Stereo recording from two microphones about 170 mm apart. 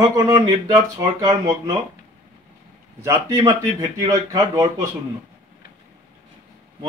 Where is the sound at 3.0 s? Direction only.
20° right (ahead or behind).